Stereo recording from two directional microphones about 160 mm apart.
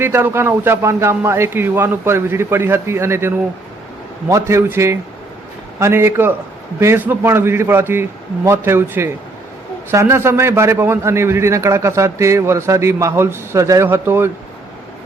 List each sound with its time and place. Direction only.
0.0 s a man's voice: 15° right (ahead or behind)